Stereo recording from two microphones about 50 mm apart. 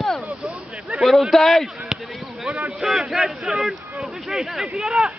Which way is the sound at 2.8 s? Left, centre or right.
Centre.